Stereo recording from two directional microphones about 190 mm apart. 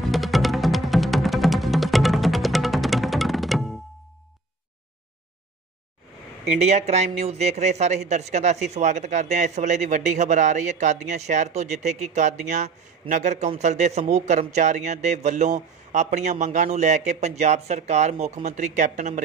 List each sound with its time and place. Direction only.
0.0 s music: centre (ahead or behind)
6.6 s a man's voice: 35° right (ahead or behind)